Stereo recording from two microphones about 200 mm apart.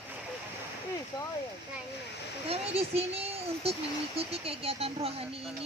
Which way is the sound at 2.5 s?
30° right (ahead or behind).